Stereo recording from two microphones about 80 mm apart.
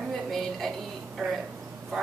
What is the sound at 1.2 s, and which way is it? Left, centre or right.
Speech, centre.